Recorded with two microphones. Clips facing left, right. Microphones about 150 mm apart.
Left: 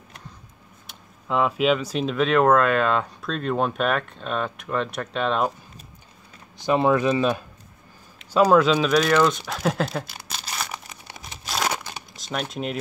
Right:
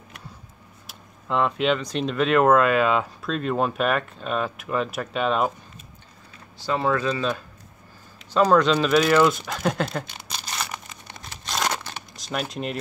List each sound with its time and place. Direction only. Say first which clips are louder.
0.8 s speech: even; centre (ahead or behind)
6.6 s speech: left 4 dB; 20° left (ahead or behind); by 9.4 s 5° right (ahead or behind)
9.4 s crumpling: left 1 dB; centre (ahead or behind)
12.3 s speech: even; centre (ahead or behind)